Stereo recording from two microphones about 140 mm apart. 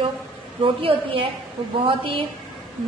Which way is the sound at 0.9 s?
40° right (ahead or behind).